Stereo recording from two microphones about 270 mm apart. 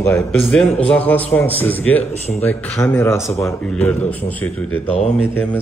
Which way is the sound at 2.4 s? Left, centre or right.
Centre.